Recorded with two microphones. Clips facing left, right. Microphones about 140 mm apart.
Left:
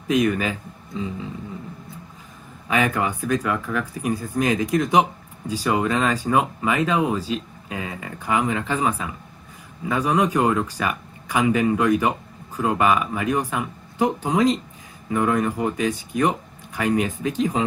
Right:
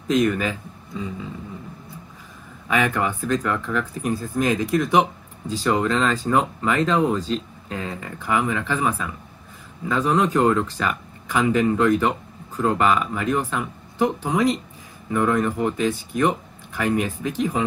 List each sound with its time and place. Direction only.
0.1 s speech: 15° left (ahead or behind)
2.7 s speech: 15° left (ahead or behind)